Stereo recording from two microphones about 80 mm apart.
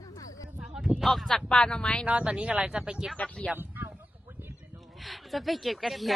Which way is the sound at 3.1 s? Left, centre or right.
Centre.